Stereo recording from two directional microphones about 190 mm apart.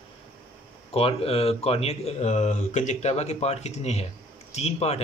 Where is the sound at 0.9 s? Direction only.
30° left (ahead or behind).